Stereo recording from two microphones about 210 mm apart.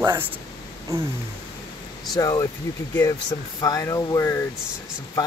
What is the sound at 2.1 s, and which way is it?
Speech, 15° left (ahead or behind).